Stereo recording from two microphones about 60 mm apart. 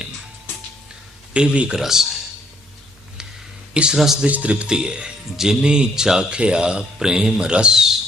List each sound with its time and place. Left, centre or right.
1.3 s speech: centre
1.8 s speech: centre
3.9 s speech: centre
4.3 s speech: right